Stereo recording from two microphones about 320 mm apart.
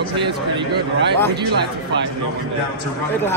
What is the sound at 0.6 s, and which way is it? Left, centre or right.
A man's voice, right.